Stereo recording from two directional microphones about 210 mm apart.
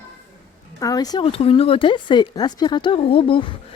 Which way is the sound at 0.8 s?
15° left (ahead or behind).